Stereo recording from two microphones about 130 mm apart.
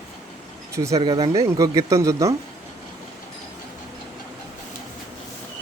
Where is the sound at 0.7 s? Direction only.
25° right (ahead or behind).